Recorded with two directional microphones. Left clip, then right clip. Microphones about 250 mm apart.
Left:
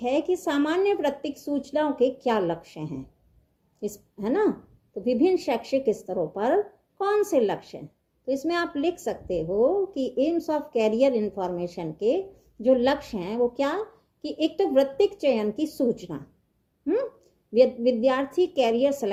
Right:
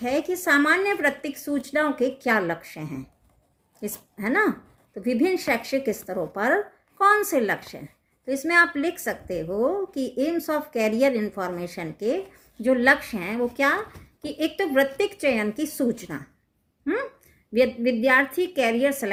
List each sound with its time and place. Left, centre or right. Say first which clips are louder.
0.0 s a woman's voice: even; centre
3.8 s a woman's voice: left 1 dB; centre
17.5 s a woman's voice: left 2 dB; centre